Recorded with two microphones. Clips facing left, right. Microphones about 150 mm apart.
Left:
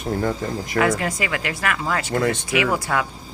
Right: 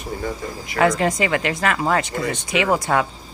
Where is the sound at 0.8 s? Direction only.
25° right (ahead or behind).